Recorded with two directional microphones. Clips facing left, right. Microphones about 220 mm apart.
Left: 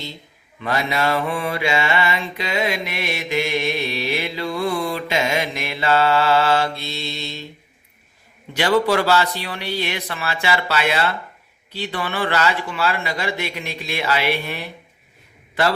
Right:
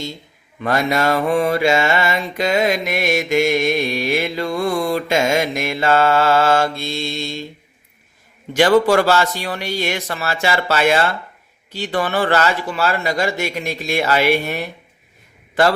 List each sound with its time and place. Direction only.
0.6 s mantra: 50° right (ahead or behind)
8.5 s mantra: 45° right (ahead or behind)